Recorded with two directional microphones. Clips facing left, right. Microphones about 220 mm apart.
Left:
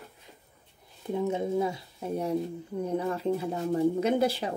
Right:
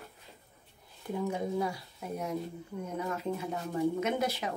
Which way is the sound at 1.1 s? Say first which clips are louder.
Left 4 dB; 25° left (ahead or behind).